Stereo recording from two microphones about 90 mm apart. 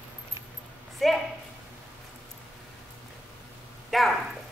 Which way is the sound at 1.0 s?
Centre (ahead or behind).